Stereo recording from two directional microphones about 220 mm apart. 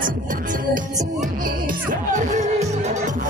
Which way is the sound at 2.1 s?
35° right (ahead or behind).